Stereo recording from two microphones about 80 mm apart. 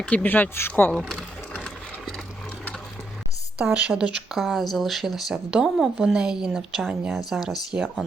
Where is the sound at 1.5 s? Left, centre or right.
Centre.